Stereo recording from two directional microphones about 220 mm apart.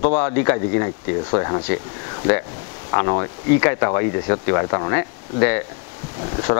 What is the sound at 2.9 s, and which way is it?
Speech, 20° left (ahead or behind).